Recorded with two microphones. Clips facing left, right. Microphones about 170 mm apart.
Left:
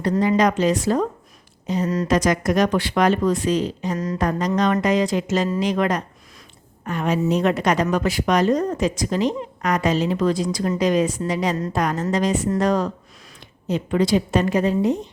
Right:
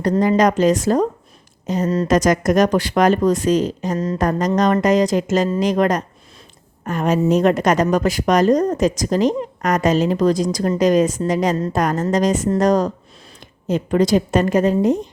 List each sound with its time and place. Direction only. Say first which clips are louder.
0.2 s a woman's voice: right 3 dB; 45° right (ahead or behind)
3.9 s speech: right 4 dB; 30° right (ahead or behind)
4.2 s a woman's voice: right 3 dB; 45° right (ahead or behind)